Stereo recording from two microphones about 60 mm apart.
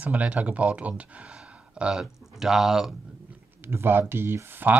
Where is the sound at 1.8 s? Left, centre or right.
Centre.